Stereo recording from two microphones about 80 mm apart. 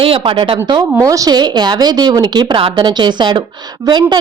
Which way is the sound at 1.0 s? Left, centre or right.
Right.